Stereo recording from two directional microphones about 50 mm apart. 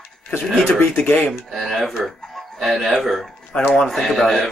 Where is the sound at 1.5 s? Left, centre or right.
Centre.